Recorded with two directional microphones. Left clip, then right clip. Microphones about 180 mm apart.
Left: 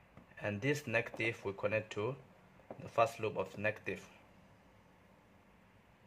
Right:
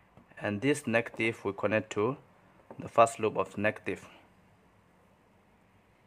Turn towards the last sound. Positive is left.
turn(degrees=-35)  # may be behind; listen again after turning